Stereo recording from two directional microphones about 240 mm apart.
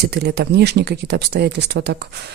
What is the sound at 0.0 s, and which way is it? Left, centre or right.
Speech, right.